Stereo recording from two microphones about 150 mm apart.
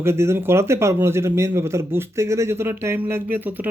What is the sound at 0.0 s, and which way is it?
Speech, 15° right (ahead or behind).